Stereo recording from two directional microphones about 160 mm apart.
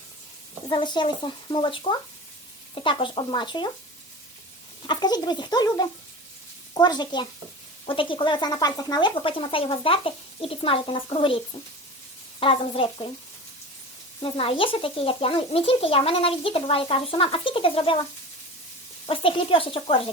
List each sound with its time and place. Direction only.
0.7 s speech: 30° left (ahead or behind)
4.8 s a child's voice: 25° left (ahead or behind)
12.4 s a child's voice: 35° left (ahead or behind)
14.2 s a child's voice: 35° left (ahead or behind)
19.0 s a child's voice: 35° left (ahead or behind)